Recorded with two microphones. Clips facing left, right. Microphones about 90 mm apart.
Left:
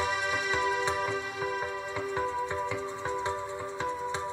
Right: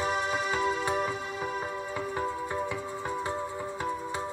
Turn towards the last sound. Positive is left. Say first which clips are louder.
# left 1 dB
turn(degrees=-10)  # may be behind; listen again after turning